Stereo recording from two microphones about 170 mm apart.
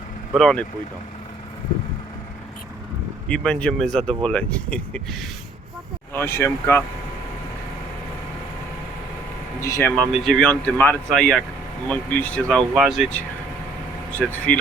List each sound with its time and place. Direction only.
0.3 s speech: centre (ahead or behind)
3.2 s speech: 5° left (ahead or behind)
6.1 s speech: 15° left (ahead or behind)
9.6 s speech: 15° left (ahead or behind)
9.9 s speech: centre (ahead or behind)
10.5 s speech: 10° left (ahead or behind)
14.2 s speech: 10° left (ahead or behind)